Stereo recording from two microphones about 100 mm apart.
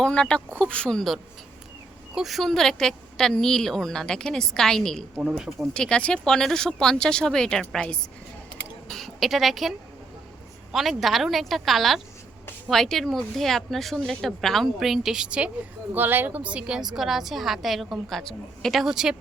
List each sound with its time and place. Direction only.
0.0 s speech: 10° left (ahead or behind)